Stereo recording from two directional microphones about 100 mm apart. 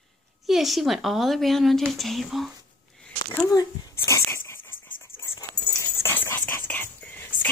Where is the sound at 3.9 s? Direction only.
25° left (ahead or behind).